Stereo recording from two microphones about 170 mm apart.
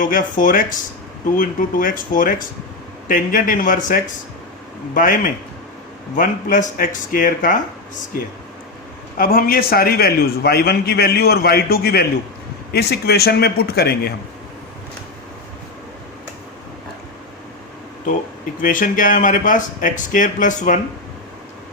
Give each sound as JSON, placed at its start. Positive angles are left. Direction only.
{"t": 0.0, "sound": "speech", "side_deg": 50}
{"t": 9.1, "sound": "a man's voice", "side_deg": 60}
{"t": 18.6, "sound": "speech", "side_deg": 50}